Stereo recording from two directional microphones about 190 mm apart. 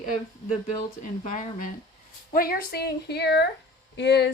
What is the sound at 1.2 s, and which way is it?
Speech, 45° left (ahead or behind).